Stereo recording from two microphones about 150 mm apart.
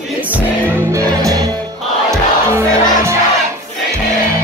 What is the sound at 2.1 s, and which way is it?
Crowd, 20° right (ahead or behind).